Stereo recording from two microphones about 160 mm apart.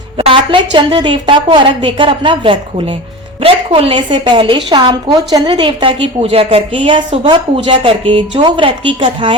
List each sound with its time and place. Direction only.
0.2 s a woman's voice: 35° right (ahead or behind)